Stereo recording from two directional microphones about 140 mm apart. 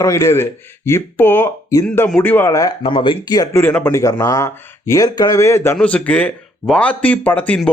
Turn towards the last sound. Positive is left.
turn(degrees=10)  # may be behind; listen again after turning